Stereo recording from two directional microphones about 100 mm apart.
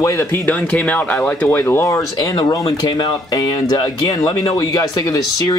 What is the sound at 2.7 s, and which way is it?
Speech, 50° left (ahead or behind).